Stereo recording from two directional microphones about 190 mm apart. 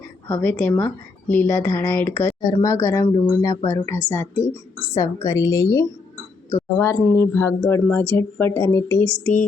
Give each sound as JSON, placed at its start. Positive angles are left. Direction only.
{"t": 0.3, "sound": "speech", "side_deg": 10}